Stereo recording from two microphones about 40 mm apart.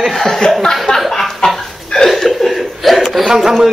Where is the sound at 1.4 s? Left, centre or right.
Centre.